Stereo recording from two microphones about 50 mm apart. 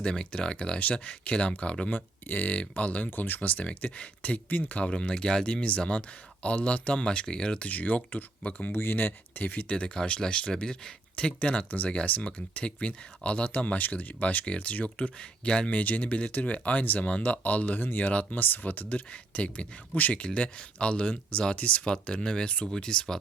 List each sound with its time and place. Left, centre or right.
0.0 s speech: centre
1.9 s speech: left
3.1 s speech: left
4.7 s speech: centre
7.7 s speech: left
8.7 s speech: left
9.6 s speech: left
15.7 s speech: left
18.3 s speech: left
21.9 s speech: centre